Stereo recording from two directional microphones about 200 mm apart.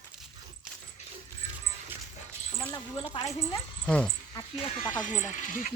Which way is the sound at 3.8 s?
5° left (ahead or behind).